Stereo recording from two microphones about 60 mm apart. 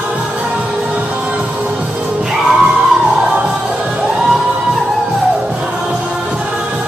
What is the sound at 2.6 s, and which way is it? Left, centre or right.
Music, centre.